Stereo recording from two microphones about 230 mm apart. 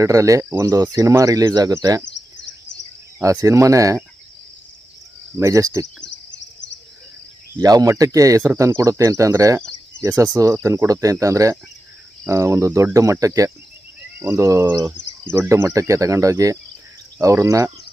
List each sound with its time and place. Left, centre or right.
0.0 s speech: centre
2.0 s a sound: left
3.2 s speech: centre
5.4 s speech: centre
6.1 s a sound: left
7.6 s speech: centre